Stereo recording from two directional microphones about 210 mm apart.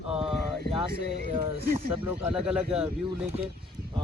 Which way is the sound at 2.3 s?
5° right (ahead or behind).